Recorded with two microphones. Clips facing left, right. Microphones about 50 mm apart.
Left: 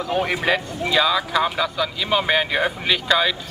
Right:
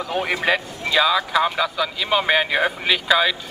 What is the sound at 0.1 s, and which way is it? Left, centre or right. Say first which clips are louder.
Speech: even; centre.